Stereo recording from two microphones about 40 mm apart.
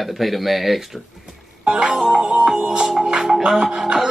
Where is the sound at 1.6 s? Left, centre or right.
Right.